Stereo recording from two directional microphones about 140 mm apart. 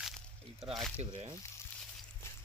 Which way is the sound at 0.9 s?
50° right (ahead or behind).